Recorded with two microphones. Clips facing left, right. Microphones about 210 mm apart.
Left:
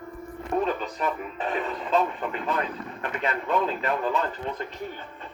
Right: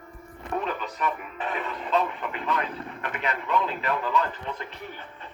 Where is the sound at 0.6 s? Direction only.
35° left (ahead or behind).